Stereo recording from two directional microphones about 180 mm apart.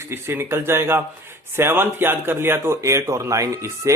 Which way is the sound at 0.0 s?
15° right (ahead or behind).